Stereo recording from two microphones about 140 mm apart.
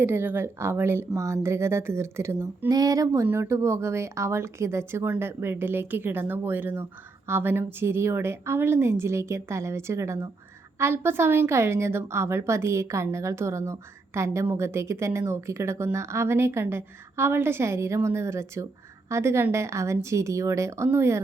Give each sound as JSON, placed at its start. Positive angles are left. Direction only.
{"t": 0.0, "sound": "a woman's voice", "side_deg": -15}